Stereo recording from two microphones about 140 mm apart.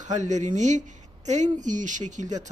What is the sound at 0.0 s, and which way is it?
Speech, 60° right (ahead or behind).